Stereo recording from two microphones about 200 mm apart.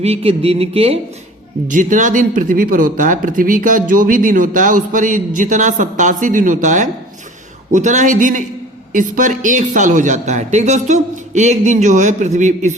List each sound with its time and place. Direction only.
0.0 s speech: 30° right (ahead or behind)
1.6 s speech: 40° right (ahead or behind)